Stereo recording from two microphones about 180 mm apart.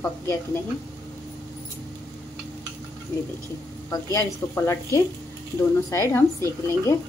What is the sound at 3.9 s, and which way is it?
A woman's voice, 15° left (ahead or behind).